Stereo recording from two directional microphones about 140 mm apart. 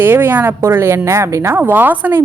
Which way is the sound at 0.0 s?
15° right (ahead or behind).